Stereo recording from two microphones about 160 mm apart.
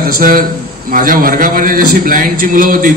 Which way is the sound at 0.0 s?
65° right (ahead or behind).